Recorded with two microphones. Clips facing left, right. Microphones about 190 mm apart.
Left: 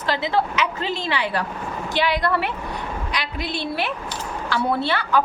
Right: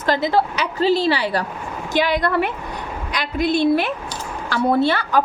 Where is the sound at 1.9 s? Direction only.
45° right (ahead or behind).